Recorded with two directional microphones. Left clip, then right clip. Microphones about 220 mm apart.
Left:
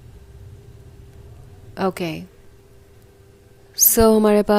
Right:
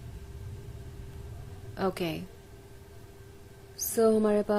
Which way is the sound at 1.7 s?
25° left (ahead or behind).